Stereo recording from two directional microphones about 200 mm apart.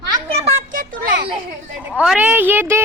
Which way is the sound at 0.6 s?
45° right (ahead or behind).